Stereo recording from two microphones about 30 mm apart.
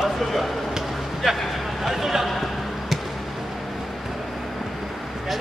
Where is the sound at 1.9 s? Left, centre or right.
Centre.